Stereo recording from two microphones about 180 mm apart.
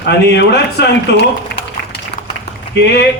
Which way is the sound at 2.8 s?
70° left (ahead or behind).